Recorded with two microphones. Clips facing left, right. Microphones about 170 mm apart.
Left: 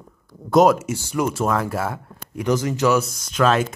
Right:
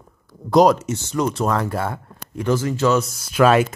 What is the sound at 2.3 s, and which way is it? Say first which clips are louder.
Speech: right 1 dB; 15° left (ahead or behind).